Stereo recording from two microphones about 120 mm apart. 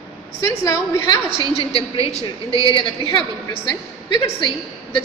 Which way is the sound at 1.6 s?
50° left (ahead or behind).